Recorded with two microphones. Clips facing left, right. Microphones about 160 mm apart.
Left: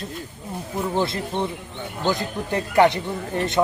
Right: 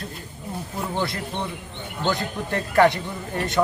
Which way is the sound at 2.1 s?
20° left (ahead or behind).